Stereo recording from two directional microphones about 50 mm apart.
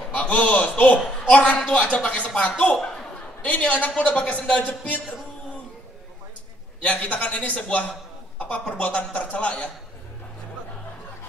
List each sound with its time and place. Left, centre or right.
0.1 s speech: left
6.8 s speech: left